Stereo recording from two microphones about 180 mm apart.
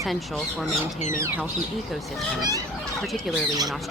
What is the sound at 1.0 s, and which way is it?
Speech, 45° left (ahead or behind).